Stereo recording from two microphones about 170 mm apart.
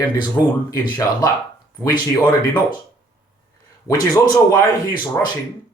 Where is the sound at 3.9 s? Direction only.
20° left (ahead or behind).